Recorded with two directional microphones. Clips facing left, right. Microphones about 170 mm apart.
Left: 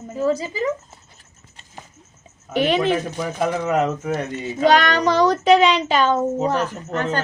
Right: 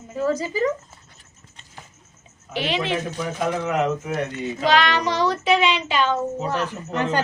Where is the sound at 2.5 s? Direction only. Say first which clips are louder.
Left 6 dB; 50° left (ahead or behind).